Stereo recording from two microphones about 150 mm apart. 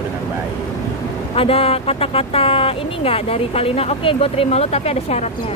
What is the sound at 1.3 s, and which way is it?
Speech, 40° left (ahead or behind).